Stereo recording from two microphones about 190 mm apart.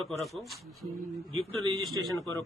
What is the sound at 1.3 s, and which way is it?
Speech, 30° right (ahead or behind).